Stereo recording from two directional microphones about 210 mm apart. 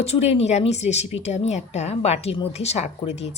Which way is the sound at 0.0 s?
30° left (ahead or behind).